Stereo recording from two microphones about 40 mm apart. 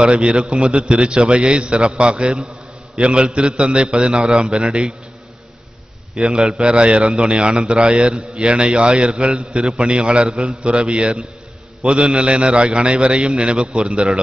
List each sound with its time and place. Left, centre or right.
0.0 s a man's voice: right
6.1 s a man's voice: centre
6.6 s a man's voice: right